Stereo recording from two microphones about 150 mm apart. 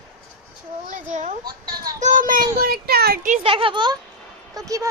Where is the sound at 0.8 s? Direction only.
60° right (ahead or behind); by 3.3 s 90° right.